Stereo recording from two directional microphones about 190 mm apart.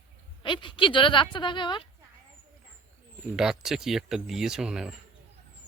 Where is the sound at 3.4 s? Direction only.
Centre (ahead or behind).